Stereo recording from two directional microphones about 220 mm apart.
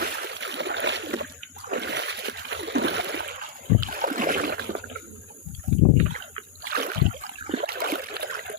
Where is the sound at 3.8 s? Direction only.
40° right (ahead or behind).